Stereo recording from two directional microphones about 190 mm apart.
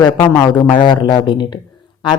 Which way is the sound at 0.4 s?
25° left (ahead or behind).